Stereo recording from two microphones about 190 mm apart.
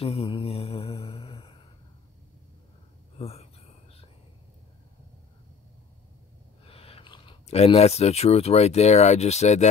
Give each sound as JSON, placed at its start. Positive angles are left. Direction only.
{"t": 0.0, "sound": "mantra", "side_deg": 30}
{"t": 3.2, "sound": "a sound", "side_deg": 30}
{"t": 6.6, "sound": "speech", "side_deg": 30}